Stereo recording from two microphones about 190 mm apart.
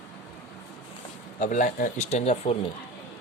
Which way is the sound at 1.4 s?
40° left (ahead or behind).